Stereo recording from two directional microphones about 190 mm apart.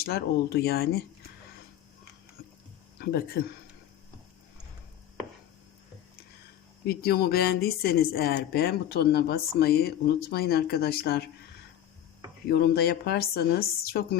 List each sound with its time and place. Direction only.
0.0 s a woman's voice: 55° left (ahead or behind)
3.0 s a woman's voice: 55° left (ahead or behind)
6.8 s a woman's voice: 55° left (ahead or behind)
12.5 s a woman's voice: 55° left (ahead or behind)